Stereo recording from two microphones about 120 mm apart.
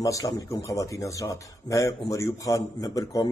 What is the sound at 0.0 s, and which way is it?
A man's voice, 30° left (ahead or behind).